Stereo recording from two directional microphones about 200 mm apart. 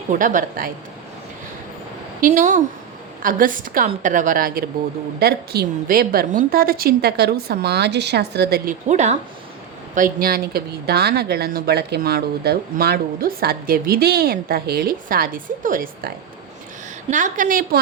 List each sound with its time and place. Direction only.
0.1 s a woman's voice: 40° right (ahead or behind)
2.2 s a woman's voice: 40° right (ahead or behind)
8.9 s a woman's voice: 35° right (ahead or behind)